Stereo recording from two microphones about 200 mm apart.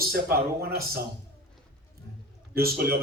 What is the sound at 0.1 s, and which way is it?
Speech, 50° right (ahead or behind).